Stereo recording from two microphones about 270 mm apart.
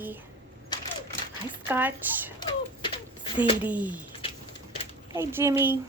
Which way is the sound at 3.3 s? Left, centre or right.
Centre.